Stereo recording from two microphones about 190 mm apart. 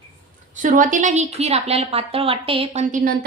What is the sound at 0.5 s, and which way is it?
A woman's voice, 45° right (ahead or behind).